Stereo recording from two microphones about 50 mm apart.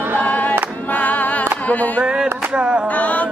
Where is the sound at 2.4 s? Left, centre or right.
Right.